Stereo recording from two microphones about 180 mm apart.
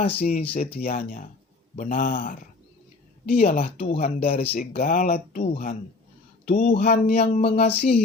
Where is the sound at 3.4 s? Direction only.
35° left (ahead or behind).